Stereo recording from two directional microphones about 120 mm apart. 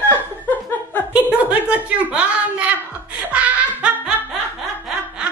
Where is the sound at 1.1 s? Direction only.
10° right (ahead or behind).